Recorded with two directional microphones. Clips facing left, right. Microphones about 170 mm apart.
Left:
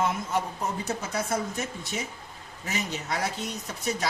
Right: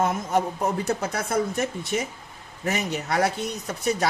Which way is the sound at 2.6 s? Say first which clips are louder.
Right 6 dB; 55° right (ahead or behind).